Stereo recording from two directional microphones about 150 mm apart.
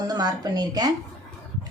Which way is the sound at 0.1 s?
25° right (ahead or behind).